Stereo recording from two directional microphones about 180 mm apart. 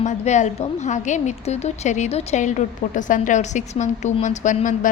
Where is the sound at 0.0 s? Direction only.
40° left (ahead or behind).